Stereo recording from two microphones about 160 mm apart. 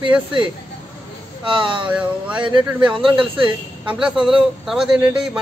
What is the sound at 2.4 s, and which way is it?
A man's voice, 30° right (ahead or behind).